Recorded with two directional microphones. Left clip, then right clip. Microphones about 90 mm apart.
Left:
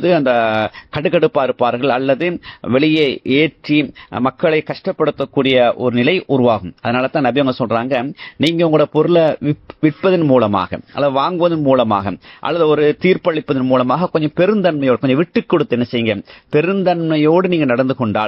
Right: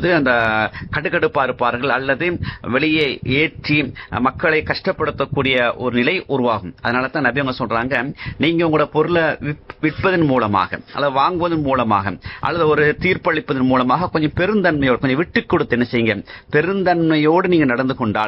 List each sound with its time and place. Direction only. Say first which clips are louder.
0.0 s a man's voice: left 2 dB; 30° left (ahead or behind)